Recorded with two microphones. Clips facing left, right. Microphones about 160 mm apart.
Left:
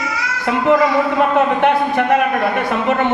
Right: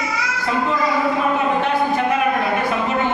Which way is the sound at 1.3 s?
70° left (ahead or behind).